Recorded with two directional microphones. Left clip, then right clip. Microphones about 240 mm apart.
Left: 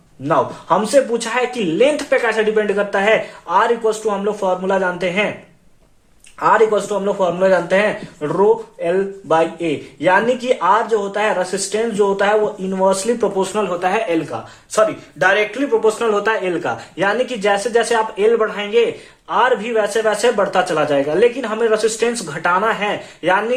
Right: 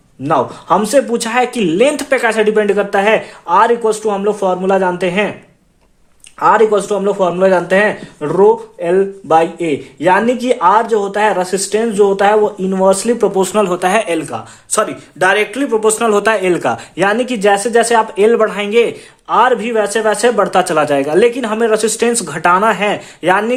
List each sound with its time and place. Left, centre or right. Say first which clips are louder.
0.3 s a man's voice: right 3 dB; right
6.4 s a man's voice: right 3 dB; right